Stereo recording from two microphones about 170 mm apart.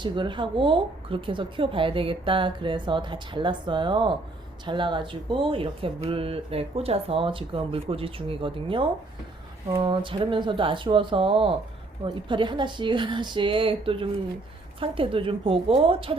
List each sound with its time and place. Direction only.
0.0 s speech: 30° right (ahead or behind)